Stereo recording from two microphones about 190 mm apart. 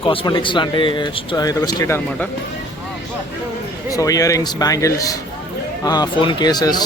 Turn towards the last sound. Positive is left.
turn(degrees=20)  # may be behind; listen again after turning